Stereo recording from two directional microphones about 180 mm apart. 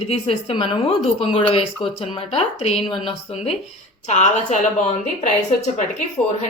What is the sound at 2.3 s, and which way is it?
A woman's voice, 35° left (ahead or behind).